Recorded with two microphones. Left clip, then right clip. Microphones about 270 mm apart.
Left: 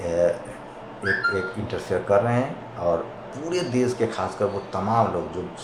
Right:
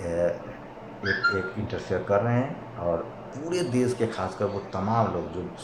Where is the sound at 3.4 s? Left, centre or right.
Centre.